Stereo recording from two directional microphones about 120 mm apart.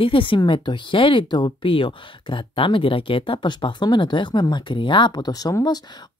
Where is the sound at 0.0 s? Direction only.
45° left (ahead or behind).